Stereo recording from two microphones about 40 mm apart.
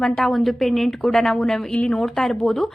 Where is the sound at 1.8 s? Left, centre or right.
Centre.